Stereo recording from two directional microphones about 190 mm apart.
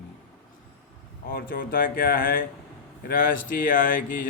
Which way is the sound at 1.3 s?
50° left (ahead or behind).